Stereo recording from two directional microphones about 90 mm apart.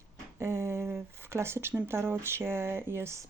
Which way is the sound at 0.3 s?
30° right (ahead or behind).